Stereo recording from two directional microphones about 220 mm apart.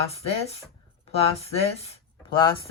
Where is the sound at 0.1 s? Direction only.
25° left (ahead or behind).